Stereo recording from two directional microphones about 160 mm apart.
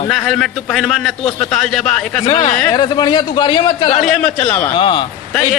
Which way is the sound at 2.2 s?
25° left (ahead or behind).